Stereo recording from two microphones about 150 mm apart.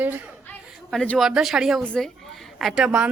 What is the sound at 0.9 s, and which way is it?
A woman's voice, 5° left (ahead or behind).